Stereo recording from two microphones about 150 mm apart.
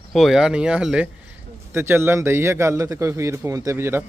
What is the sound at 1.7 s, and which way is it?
A man's voice, 15° right (ahead or behind).